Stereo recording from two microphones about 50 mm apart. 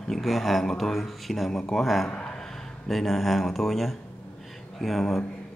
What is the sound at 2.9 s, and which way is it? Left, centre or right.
A man's voice, centre.